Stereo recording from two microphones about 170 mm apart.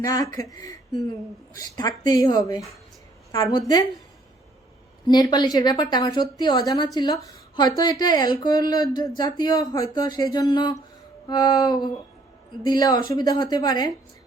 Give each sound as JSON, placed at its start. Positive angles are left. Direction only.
{"t": 0.0, "sound": "speech", "side_deg": 20}
{"t": 5.0, "sound": "a woman's voice", "side_deg": 25}